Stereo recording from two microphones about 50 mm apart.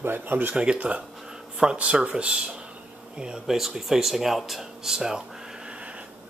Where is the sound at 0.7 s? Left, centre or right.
Right.